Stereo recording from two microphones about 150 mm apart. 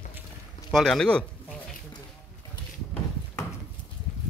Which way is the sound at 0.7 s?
Centre (ahead or behind).